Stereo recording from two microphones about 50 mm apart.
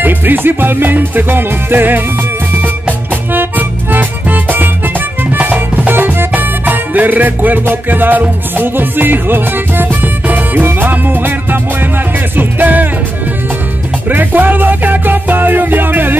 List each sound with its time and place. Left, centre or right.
0.0 s music: right
3.3 s music: right
12.4 s music: right
14.0 s music: right